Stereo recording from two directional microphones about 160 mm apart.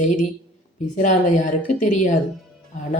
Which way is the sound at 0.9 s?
50° left (ahead or behind).